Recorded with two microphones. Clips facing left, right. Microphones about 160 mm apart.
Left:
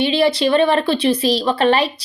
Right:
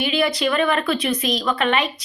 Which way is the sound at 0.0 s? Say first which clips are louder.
Left 5 dB; 30° left (ahead or behind).